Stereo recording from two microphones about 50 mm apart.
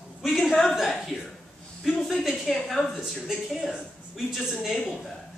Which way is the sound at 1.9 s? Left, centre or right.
Centre.